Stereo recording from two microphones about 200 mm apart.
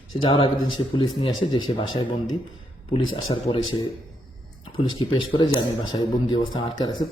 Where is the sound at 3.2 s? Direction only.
25° left (ahead or behind).